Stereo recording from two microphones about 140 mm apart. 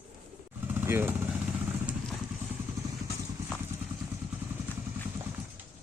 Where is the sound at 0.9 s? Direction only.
15° right (ahead or behind).